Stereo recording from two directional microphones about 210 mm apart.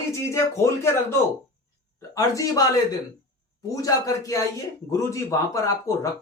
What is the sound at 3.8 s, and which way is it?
Speech, 15° left (ahead or behind).